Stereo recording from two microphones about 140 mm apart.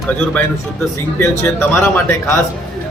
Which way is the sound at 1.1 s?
15° left (ahead or behind).